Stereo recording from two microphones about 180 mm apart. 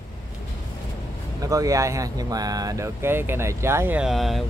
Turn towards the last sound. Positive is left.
turn(degrees=0)  # may be behind; listen again after turning